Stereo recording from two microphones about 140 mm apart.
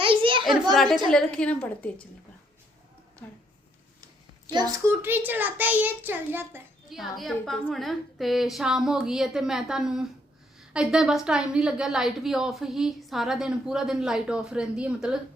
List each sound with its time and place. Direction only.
0.0 s a sound: 40° right (ahead or behind)
0.4 s a woman's voice: centre (ahead or behind)
4.9 s a child's voice: 15° right (ahead or behind)
6.9 s a woman's voice: centre (ahead or behind)